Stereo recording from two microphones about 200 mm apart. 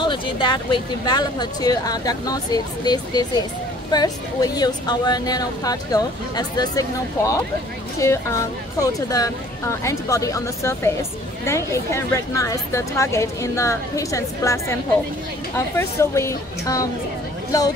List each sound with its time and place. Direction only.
0.0 s speech: 25° left (ahead or behind)